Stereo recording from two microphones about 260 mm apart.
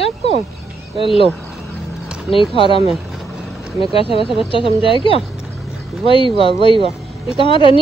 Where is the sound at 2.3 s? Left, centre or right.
Centre.